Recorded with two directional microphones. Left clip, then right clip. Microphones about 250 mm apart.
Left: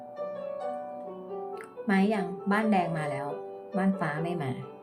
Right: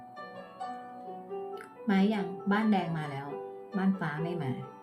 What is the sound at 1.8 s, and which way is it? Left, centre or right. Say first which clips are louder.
A woman's voice: left 3 dB; centre.